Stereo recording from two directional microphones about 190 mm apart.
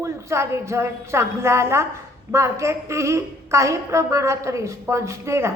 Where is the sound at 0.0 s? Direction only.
15° right (ahead or behind).